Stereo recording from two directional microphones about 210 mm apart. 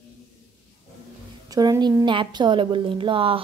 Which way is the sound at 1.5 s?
15° right (ahead or behind).